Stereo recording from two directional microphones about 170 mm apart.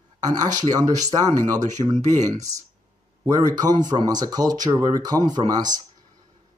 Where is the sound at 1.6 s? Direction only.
45° right (ahead or behind).